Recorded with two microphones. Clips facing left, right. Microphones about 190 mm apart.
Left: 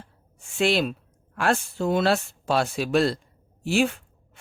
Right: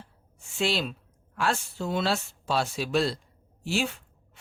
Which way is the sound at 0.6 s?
55° left (ahead or behind).